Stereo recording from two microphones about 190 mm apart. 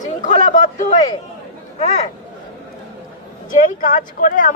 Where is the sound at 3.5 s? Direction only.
45° left (ahead or behind).